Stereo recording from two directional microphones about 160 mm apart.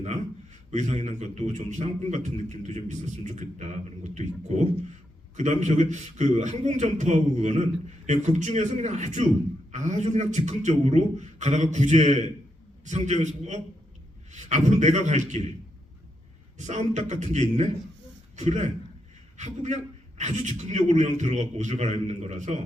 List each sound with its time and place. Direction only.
0.7 s a man's voice: 45° right (ahead or behind)
16.6 s a man's voice: 45° right (ahead or behind)